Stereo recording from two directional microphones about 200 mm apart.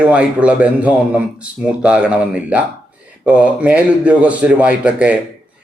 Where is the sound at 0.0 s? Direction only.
5° right (ahead or behind).